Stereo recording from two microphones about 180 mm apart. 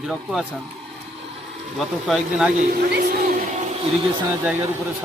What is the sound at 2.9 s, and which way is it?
Speech, 55° right (ahead or behind).